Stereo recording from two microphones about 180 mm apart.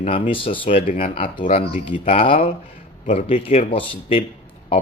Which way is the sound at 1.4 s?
45° left (ahead or behind).